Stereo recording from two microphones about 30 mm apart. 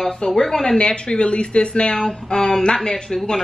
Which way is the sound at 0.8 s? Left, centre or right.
Left.